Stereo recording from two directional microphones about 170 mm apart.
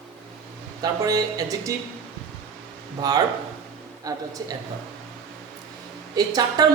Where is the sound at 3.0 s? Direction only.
20° right (ahead or behind).